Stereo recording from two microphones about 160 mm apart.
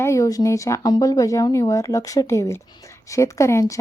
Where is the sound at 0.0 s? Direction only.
20° left (ahead or behind).